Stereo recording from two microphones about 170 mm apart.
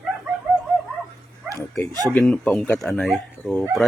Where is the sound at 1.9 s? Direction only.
20° right (ahead or behind).